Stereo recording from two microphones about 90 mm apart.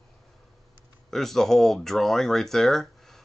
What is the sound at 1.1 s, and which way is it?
Speech, 5° left (ahead or behind).